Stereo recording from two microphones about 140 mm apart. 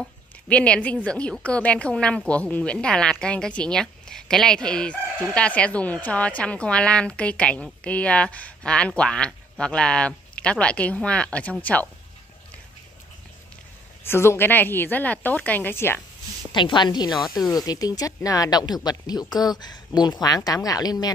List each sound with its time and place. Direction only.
0.0 s a woman's voice: 10° left (ahead or behind)
14.0 s a woman's voice: 15° left (ahead or behind)
16.5 s speech: 35° left (ahead or behind)